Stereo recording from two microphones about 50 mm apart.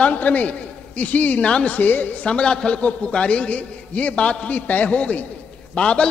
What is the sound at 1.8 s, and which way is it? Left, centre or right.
Speech, left.